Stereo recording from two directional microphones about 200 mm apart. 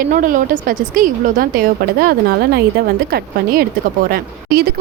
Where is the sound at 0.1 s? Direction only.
40° right (ahead or behind).